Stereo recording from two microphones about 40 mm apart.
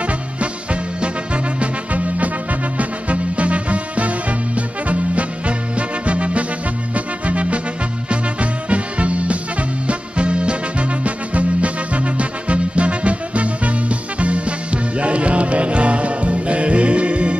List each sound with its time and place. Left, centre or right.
0.0 s music: right